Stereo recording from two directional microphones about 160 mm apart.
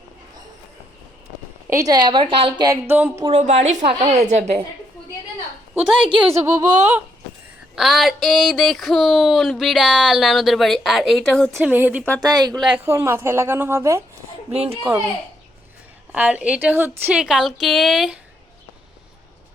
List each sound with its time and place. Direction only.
1.7 s a woman's voice: 20° right (ahead or behind)
2.6 s a woman's voice: 15° right (ahead or behind)
3.2 s a woman's voice: 45° right (ahead or behind)
5.7 s speech: 5° right (ahead or behind)
6.3 s a woman's voice: 20° right (ahead or behind)
7.8 s speech: centre (ahead or behind)
11.6 s a woman's voice: 10° right (ahead or behind)
12.2 s a woman's voice: 25° right (ahead or behind)
12.8 s a woman's voice: 15° right (ahead or behind)
14.5 s a child's voice: 40° right (ahead or behind)
16.1 s a woman's voice: 10° right (ahead or behind)